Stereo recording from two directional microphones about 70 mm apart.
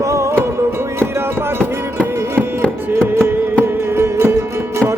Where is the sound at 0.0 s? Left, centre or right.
Right.